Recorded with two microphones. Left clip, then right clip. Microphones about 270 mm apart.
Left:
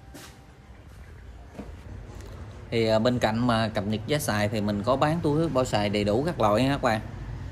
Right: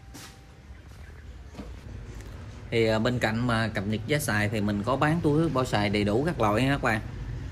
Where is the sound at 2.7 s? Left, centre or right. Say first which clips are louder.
Left 2 dB; centre.